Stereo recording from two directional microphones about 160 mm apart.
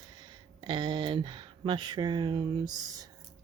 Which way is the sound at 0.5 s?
30° right (ahead or behind).